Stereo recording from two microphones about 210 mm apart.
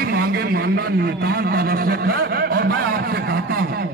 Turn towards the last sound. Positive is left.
turn(degrees=-45)  # may be behind; listen again after turning